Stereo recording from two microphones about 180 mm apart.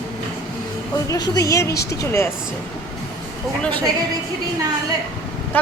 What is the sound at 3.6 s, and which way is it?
Speech, 10° left (ahead or behind).